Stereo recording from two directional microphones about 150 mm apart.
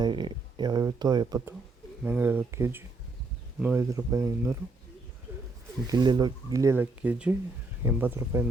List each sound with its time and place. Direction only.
0.0 s speech: 30° right (ahead or behind)
2.0 s speech: 10° right (ahead or behind)
5.9 s speech: 25° right (ahead or behind)